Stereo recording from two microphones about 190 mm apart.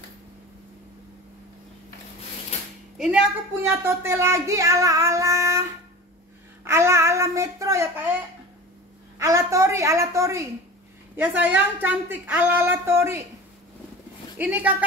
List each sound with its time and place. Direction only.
3.0 s a woman's voice: 5° right (ahead or behind)
9.2 s a woman's voice: 15° right (ahead or behind)
14.4 s a woman's voice: 10° right (ahead or behind)